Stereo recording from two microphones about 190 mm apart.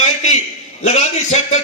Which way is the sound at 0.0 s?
40° left (ahead or behind).